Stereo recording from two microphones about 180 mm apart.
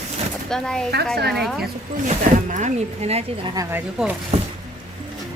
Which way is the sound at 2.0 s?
40° right (ahead or behind).